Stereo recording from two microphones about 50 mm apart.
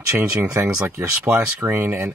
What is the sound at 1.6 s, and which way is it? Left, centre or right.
Speech, right.